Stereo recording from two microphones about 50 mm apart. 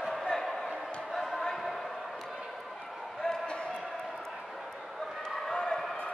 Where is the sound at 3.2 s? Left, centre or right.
Centre.